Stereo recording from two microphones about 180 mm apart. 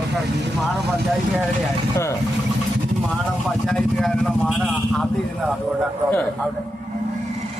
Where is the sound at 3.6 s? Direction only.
5° left (ahead or behind).